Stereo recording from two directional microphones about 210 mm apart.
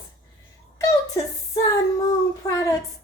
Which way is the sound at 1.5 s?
15° left (ahead or behind).